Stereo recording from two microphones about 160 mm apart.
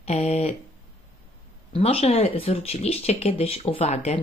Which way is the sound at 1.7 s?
40° left (ahead or behind).